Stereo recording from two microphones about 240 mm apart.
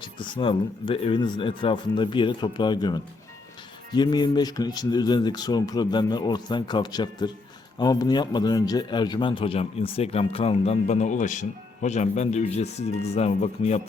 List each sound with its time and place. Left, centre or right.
0.0 s a man's voice: left